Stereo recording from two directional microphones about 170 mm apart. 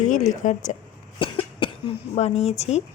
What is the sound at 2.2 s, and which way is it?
Speech, 40° left (ahead or behind).